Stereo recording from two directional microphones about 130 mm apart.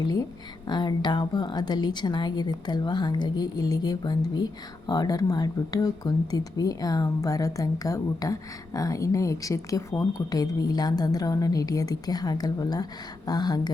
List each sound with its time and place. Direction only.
0.7 s a woman's voice: 35° left (ahead or behind)